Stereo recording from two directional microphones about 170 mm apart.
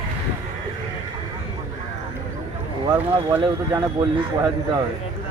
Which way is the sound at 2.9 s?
15° right (ahead or behind).